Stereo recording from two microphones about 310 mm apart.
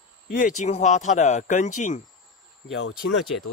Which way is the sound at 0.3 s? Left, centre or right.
Left.